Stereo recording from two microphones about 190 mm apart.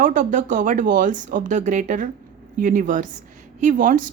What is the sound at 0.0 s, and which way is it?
A woman's voice, 45° right (ahead or behind).